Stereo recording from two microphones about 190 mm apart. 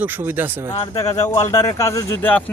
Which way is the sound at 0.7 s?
20° left (ahead or behind).